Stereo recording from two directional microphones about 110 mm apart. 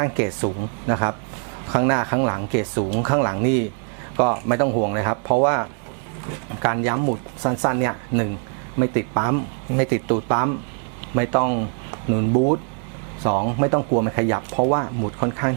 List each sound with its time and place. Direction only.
0.0 s speech: 10° right (ahead or behind)
13.2 s speech: 15° right (ahead or behind)